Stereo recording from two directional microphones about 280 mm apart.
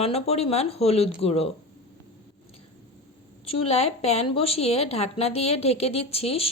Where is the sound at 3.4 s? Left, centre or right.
Left.